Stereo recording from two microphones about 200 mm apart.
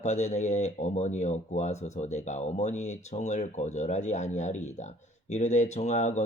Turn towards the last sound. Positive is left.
turn(degrees=35)  # may be behind; listen again after turning